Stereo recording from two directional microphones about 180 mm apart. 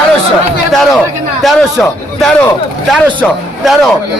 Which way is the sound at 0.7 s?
Centre (ahead or behind).